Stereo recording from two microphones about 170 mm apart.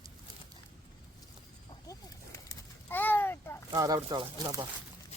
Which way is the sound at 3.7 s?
20° right (ahead or behind).